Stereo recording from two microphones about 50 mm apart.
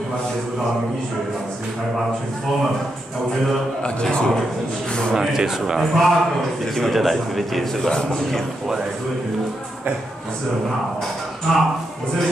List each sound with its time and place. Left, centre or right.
3.8 s a man's voice: centre
5.1 s a man's voice: centre
11.5 s a man's voice: centre